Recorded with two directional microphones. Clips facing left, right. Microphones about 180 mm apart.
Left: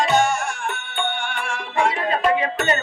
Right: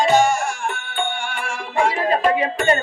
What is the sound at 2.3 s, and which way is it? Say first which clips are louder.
Music: right 3 dB; 30° right (ahead or behind).